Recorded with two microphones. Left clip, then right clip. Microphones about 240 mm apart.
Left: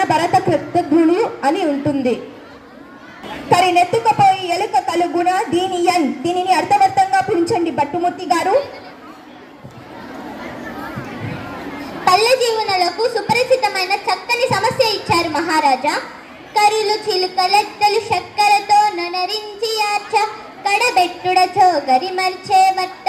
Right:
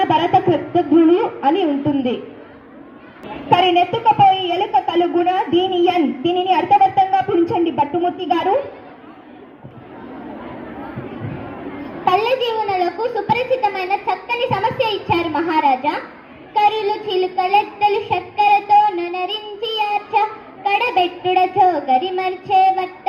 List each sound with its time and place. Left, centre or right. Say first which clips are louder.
0.0 s speech: even; left
3.5 s speech: left 1 dB; left
12.0 s speech: left 3 dB; left